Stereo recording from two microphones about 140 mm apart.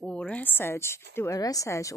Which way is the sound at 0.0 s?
5° left (ahead or behind).